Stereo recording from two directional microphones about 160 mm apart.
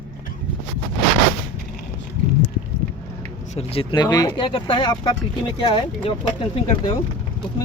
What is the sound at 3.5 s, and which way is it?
Speech, 35° left (ahead or behind).